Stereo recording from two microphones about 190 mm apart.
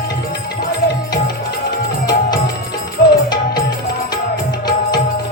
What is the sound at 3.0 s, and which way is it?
Music, 50° left (ahead or behind).